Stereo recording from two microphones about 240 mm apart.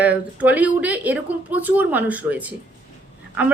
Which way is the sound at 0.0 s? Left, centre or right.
Centre.